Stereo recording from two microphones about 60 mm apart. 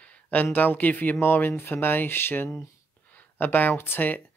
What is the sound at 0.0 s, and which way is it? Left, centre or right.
Speech, left.